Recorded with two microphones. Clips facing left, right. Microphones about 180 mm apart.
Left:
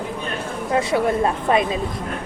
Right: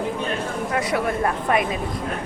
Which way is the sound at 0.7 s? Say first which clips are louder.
Left 5 dB; 25° left (ahead or behind).